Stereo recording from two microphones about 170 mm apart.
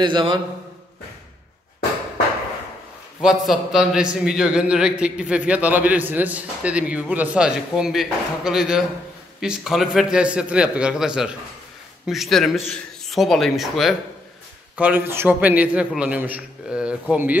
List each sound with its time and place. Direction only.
0.0 s a man's voice: 30° right (ahead or behind)
3.2 s a man's voice: 5° right (ahead or behind)